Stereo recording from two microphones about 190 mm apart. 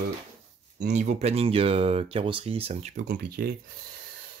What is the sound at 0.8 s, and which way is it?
Speech, 40° right (ahead or behind).